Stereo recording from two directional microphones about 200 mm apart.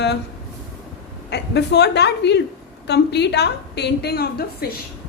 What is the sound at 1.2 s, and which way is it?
A woman's voice, 55° left (ahead or behind).